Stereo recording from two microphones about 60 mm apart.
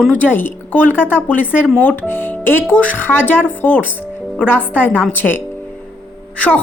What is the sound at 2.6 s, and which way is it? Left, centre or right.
A woman's voice, left.